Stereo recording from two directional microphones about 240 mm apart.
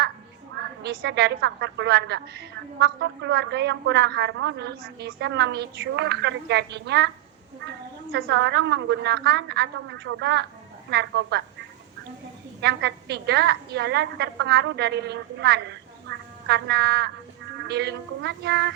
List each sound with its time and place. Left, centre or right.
0.8 s a woman's voice: right
8.1 s a woman's voice: right
12.6 s a woman's voice: right
16.0 s frog: right
17.7 s a woman's voice: right